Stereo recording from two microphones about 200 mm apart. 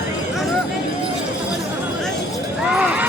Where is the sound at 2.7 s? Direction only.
5° right (ahead or behind).